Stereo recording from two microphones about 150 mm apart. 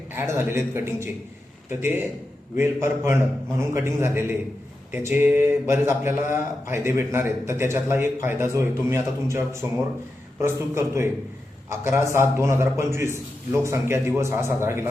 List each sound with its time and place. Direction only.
0.1 s speech: 15° right (ahead or behind)